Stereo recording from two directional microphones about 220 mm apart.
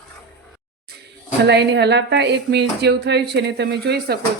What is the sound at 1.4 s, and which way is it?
Speech, 50° right (ahead or behind).